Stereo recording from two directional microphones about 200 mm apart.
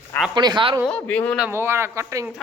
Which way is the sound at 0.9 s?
5° left (ahead or behind).